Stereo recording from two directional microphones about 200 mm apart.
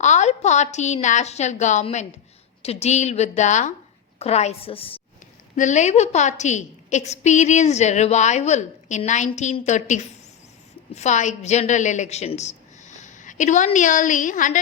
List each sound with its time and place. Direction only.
0.0 s a woman's voice: 35° left (ahead or behind)